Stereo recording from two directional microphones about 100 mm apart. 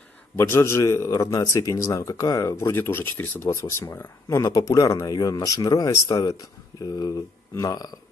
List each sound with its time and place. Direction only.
0.4 s speech: 25° left (ahead or behind)